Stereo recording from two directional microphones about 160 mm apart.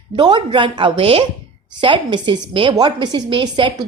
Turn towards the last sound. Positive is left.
turn(degrees=-30)  # may be behind; listen again after turning